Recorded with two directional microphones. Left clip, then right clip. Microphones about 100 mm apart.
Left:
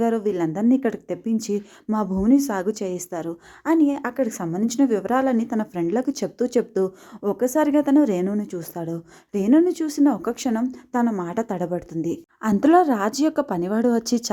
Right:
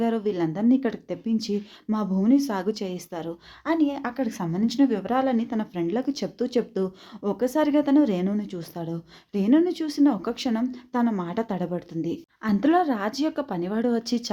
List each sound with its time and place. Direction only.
0.0 s speech: 30° left (ahead or behind)
0.4 s speech: 20° left (ahead or behind)
0.7 s speech: 40° left (ahead or behind)
7.2 s speech: 25° left (ahead or behind)
12.4 s speech: 50° left (ahead or behind)